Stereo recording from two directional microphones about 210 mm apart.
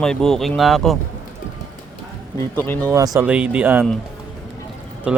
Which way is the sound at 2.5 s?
10° left (ahead or behind).